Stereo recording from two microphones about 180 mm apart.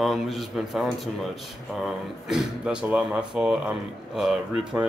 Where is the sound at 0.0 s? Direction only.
Centre (ahead or behind).